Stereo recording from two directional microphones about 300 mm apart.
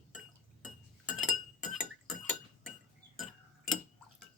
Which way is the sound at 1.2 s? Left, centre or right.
Centre.